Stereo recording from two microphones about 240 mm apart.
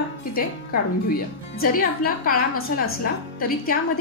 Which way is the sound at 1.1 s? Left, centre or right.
Left.